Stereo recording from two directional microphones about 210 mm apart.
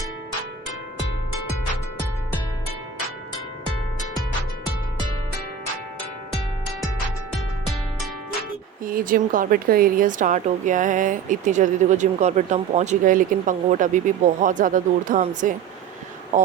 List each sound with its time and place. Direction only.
8.8 s speech: 40° right (ahead or behind)